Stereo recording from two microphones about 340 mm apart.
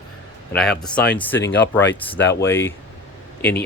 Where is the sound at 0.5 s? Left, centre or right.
Centre.